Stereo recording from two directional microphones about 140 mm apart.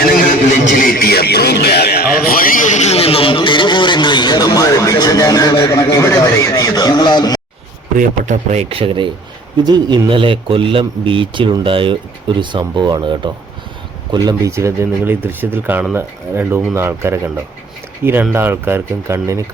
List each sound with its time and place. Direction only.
0.2 s a sound: 85° left; by 7.4 s 30° left (ahead or behind)
7.9 s speech: 65° right (ahead or behind)
8.7 s speech: 40° right (ahead or behind); by 19.4 s 20° right (ahead or behind)